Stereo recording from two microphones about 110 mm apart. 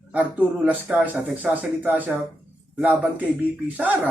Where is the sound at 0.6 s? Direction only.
15° right (ahead or behind).